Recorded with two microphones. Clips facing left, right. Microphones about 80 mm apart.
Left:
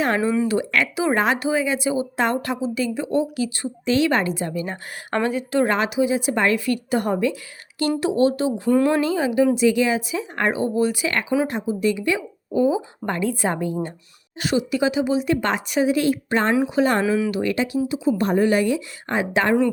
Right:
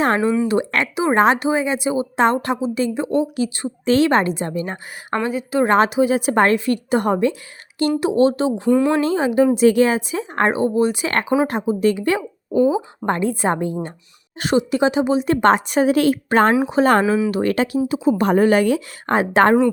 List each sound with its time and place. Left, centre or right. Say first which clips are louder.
0.2 s speech: right 3 dB; centre
0.4 s a woman's voice: right 2 dB; right
3.8 s a woman's voice: right 4 dB; right
5.1 s a woman's voice: right 1 dB; centre
5.6 s a woman's voice: right 5 dB; right
6.7 s a woman's voice: right 3 dB; right
9.6 s a woman's voice: right 4 dB; right
11.1 s a woman's voice: right 3 dB; right
12.6 s a woman's voice: right 3 dB; right
16.6 s a woman's voice: right 3 dB; right
17.3 s a woman's voice: right 3 dB; right
18.2 s a woman's voice: right 4 dB; right